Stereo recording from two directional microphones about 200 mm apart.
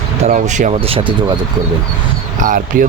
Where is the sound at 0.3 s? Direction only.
35° right (ahead or behind).